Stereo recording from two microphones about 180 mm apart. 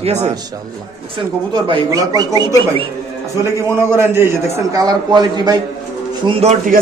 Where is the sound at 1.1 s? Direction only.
25° right (ahead or behind).